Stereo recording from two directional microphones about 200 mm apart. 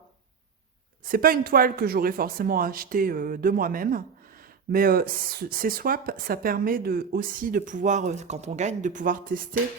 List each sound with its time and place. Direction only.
1.1 s speech: 45° right (ahead or behind)